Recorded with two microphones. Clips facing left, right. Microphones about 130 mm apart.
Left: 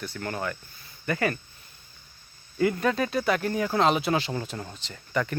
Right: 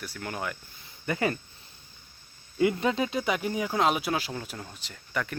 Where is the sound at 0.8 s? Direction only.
20° right (ahead or behind).